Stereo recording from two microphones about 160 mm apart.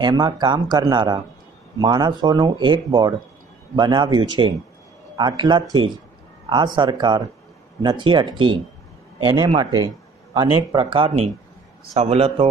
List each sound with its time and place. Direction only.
0.0 s speech: 25° right (ahead or behind)